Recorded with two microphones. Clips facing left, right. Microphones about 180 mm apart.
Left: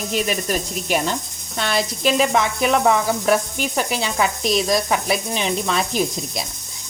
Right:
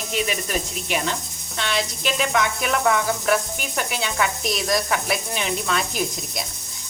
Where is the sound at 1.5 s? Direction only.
40° left (ahead or behind).